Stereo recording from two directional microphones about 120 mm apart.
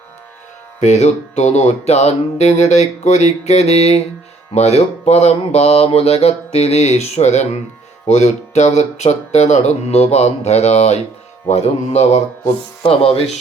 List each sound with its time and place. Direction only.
0.8 s music: 70° left (ahead or behind)
4.5 s speech: 65° left (ahead or behind)
12.8 s speech: 55° left (ahead or behind)